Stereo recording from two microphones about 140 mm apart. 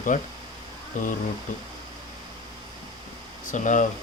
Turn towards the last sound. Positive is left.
turn(degrees=65)  # may be behind; listen again after turning